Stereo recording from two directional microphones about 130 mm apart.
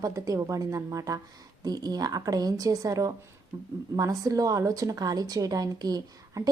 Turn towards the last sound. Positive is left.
turn(degrees=-30)  # may be behind; listen again after turning